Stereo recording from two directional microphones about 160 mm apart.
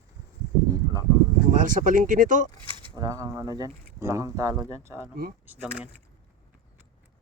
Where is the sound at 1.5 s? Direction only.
55° right (ahead or behind).